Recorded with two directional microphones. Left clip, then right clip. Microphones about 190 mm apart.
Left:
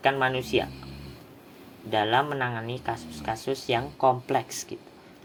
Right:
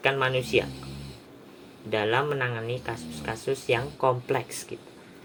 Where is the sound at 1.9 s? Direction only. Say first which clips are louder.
Left 1 dB; 30° left (ahead or behind).